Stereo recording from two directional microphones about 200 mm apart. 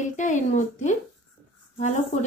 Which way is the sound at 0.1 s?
40° left (ahead or behind).